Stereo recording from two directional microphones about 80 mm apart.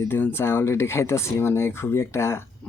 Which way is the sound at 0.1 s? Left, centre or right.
Left.